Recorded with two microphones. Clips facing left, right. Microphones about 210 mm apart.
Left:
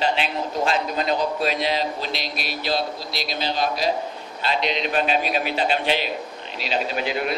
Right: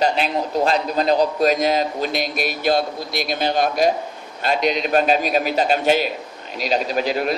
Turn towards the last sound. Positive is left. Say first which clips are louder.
# right 4 dB
turn(degrees=-40)  # may be behind; listen again after turning